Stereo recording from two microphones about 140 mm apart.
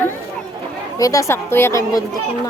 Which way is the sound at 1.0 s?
25° left (ahead or behind).